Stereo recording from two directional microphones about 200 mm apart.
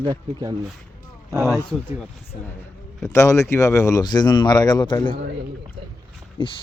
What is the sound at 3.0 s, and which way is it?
Speech, 15° left (ahead or behind).